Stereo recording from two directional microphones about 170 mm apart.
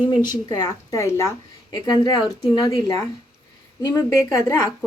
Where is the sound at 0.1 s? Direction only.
25° left (ahead or behind).